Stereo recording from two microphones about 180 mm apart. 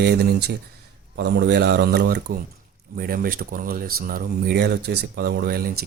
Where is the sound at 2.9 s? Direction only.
55° right (ahead or behind).